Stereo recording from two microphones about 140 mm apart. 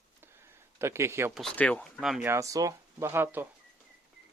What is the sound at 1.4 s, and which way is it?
Speech, 5° left (ahead or behind).